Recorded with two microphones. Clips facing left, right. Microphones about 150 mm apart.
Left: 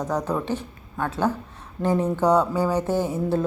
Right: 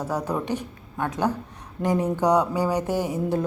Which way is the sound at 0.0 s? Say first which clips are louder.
Left 1 dB; 10° right (ahead or behind).